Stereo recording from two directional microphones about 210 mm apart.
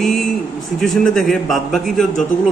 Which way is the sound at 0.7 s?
Centre (ahead or behind).